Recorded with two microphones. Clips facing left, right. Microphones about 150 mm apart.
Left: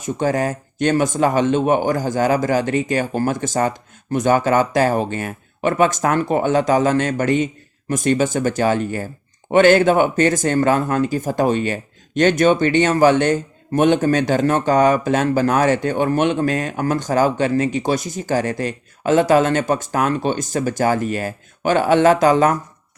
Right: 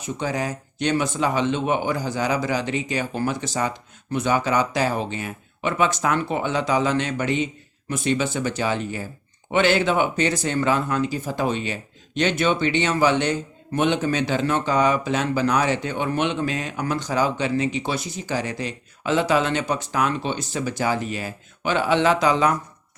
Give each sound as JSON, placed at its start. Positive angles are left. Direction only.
{"t": 0.0, "sound": "speech", "side_deg": 45}